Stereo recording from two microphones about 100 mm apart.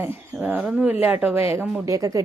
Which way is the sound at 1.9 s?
35° right (ahead or behind).